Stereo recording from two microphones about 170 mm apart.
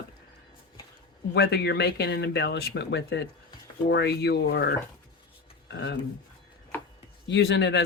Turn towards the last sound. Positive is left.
turn(degrees=90)